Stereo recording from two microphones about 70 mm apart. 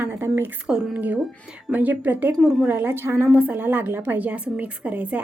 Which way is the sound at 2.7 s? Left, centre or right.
Right.